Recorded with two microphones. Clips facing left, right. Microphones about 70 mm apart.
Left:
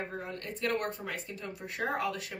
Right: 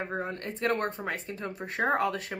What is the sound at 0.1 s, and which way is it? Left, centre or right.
Speech, right.